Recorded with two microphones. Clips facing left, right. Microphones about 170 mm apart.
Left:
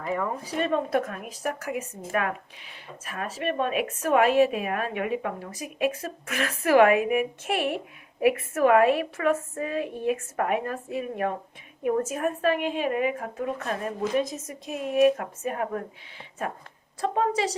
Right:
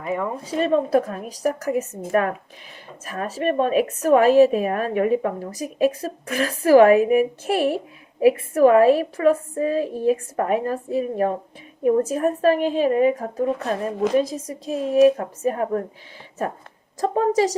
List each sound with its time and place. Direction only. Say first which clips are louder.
0.0 s a woman's voice: right 3 dB; 20° right (ahead or behind); by 1.9 s 40° right (ahead or behind)
3.0 s a woman's voice: right 6 dB; 40° right (ahead or behind)
17.0 s a woman's voice: right 6 dB; 40° right (ahead or behind)